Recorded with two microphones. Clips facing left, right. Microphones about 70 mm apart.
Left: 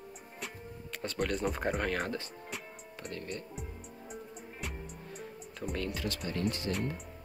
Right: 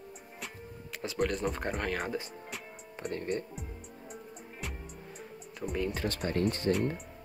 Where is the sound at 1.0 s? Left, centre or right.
Centre.